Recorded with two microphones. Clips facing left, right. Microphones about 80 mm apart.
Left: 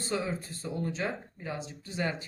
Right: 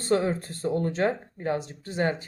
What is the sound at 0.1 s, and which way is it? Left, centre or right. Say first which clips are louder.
Speech: right 9 dB; right.